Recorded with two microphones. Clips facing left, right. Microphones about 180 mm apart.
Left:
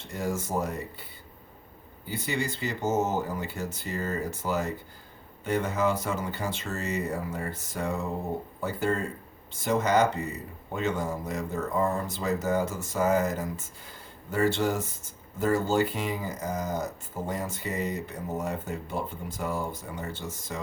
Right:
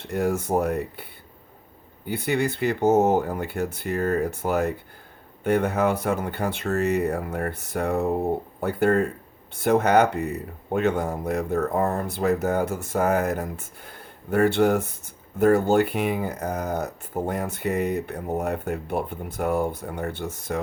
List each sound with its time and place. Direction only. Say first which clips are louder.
0.0 s speech: right 7 dB; 60° right (ahead or behind)
2.0 s speech: right 7 dB; 60° right (ahead or behind)